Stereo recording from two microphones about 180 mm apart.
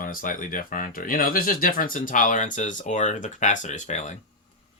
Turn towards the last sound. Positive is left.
turn(degrees=40)  # may be behind; listen again after turning